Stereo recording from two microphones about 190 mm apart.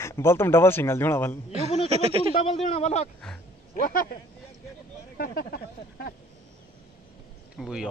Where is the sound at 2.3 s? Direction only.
35° left (ahead or behind).